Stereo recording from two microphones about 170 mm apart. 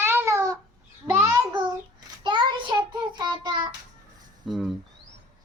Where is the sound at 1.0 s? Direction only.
10° right (ahead or behind).